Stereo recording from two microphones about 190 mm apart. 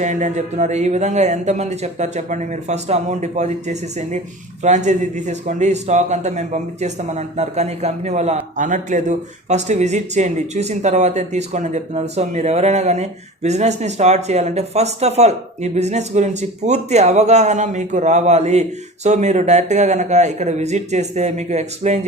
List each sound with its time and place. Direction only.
0.0 s a man's voice: 40° right (ahead or behind)